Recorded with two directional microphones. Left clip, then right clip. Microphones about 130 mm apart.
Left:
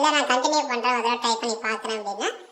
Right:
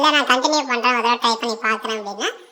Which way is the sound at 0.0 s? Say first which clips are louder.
Right 5 dB; 30° right (ahead or behind).